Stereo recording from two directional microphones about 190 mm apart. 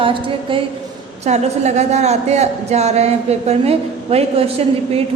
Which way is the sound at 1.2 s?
35° right (ahead or behind).